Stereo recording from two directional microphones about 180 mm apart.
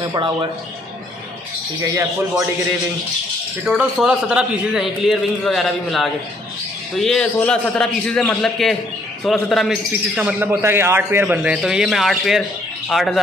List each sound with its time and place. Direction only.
0.1 s speech: 25° right (ahead or behind)
3.6 s a man's voice: 5° right (ahead or behind)